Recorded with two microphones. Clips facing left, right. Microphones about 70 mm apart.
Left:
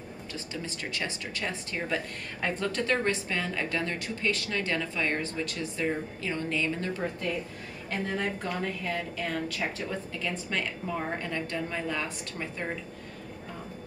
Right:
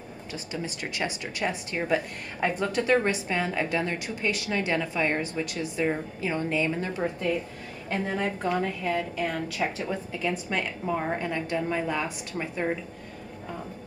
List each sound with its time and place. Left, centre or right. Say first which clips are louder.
0.3 s speech: right 4 dB; centre